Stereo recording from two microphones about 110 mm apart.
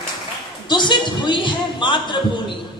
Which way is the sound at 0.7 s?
45° left (ahead or behind).